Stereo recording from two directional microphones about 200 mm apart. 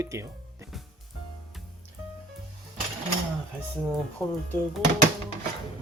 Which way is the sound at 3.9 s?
5° left (ahead or behind).